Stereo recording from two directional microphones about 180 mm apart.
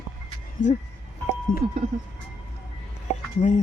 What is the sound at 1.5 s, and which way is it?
Speech, 50° left (ahead or behind).